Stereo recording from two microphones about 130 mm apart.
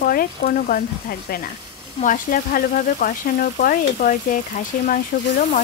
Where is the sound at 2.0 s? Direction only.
90° left.